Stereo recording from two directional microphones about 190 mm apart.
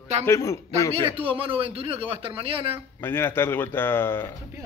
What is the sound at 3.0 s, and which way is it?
Speech, 10° left (ahead or behind).